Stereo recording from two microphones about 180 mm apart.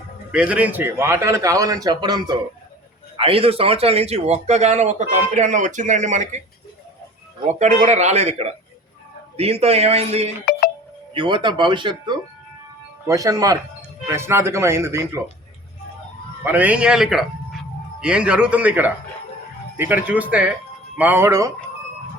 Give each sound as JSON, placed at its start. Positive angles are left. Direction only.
{"t": 0.3, "sound": "a man's voice", "side_deg": -5}
{"t": 7.4, "sound": "speech", "side_deg": -40}
{"t": 10.5, "sound": "a sound", "side_deg": 55}
{"t": 11.1, "sound": "a man's voice", "side_deg": -25}
{"t": 16.4, "sound": "a man's voice", "side_deg": -10}